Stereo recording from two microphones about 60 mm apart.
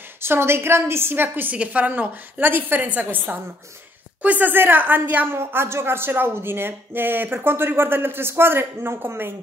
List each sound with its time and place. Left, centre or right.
0.2 s a woman's voice: right